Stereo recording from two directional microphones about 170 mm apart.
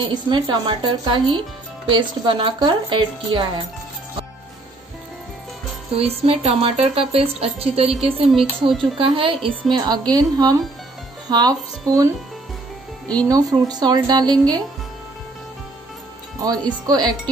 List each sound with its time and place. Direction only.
0.0 s a woman's voice: 25° right (ahead or behind)
5.9 s a woman's voice: 35° right (ahead or behind); by 12.0 s 20° right (ahead or behind)
13.3 s a woman's voice: 20° right (ahead or behind)
16.3 s a woman's voice: 20° right (ahead or behind)